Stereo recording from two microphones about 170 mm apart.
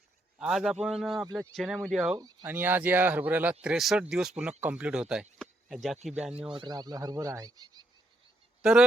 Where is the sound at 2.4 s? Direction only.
10° right (ahead or behind).